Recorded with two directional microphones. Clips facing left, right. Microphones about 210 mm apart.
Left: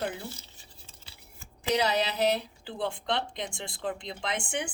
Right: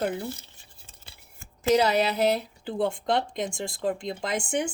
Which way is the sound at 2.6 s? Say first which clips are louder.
Right 6 dB; 45° right (ahead or behind).